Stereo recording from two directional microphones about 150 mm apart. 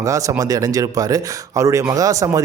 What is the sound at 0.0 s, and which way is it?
A man's voice, 20° right (ahead or behind).